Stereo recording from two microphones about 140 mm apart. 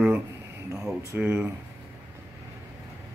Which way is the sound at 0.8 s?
10° right (ahead or behind).